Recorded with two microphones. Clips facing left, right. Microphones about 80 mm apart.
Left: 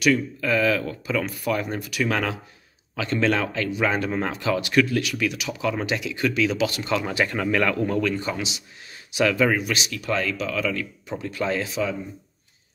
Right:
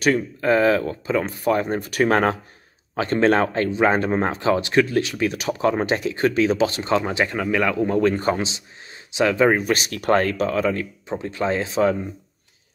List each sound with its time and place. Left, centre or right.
0.0 s speech: right
7.3 s speech: centre
8.0 s speech: right
9.1 s speech: right
11.8 s speech: right